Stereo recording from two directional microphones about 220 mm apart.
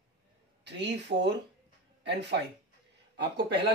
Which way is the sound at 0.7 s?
50° right (ahead or behind).